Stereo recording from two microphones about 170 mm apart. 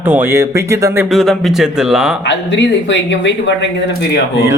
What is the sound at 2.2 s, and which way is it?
Speech, 90° left.